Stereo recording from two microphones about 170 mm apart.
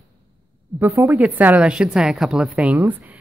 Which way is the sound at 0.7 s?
15° right (ahead or behind).